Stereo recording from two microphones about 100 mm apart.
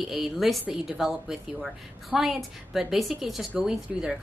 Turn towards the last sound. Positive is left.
turn(degrees=-5)  # may be behind; listen again after turning